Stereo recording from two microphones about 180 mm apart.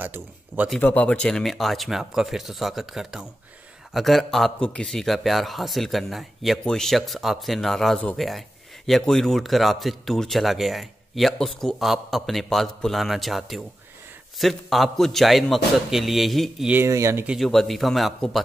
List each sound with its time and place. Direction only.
0.0 s speech: 10° right (ahead or behind)
0.7 s a man's voice: 10° left (ahead or behind); by 17.4 s 10° right (ahead or behind)
17.4 s a man's voice: centre (ahead or behind)